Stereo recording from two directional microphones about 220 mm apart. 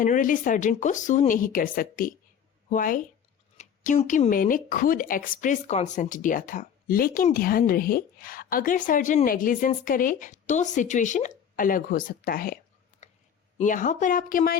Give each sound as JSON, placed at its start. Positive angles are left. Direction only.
{"t": 0.0, "sound": "a woman's voice", "side_deg": 35}
{"t": 13.0, "sound": "a sound", "side_deg": 30}
{"t": 13.6, "sound": "speech", "side_deg": 35}